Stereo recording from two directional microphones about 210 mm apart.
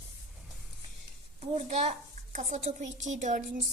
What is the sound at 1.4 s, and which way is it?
A woman's voice, 30° right (ahead or behind).